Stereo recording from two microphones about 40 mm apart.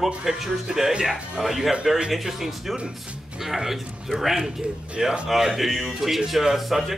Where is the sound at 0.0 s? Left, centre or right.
Centre.